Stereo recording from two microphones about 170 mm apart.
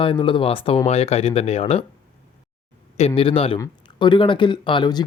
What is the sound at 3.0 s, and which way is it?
Speech, 35° left (ahead or behind).